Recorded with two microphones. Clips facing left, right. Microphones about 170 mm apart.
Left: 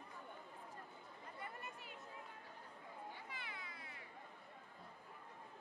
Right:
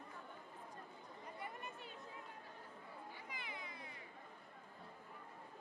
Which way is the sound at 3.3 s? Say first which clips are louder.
Right 2 dB; 15° right (ahead or behind).